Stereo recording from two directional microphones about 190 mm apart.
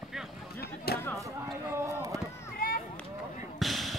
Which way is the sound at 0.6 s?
55° left (ahead or behind).